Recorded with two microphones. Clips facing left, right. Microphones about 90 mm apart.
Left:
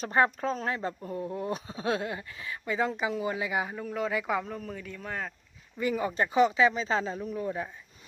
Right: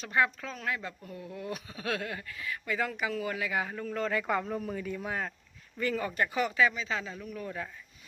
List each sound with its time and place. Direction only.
0.0 s speech: 35° left (ahead or behind); by 5.3 s 5° right (ahead or behind)
5.7 s speech: 15° left (ahead or behind)
6.7 s speech: 35° left (ahead or behind)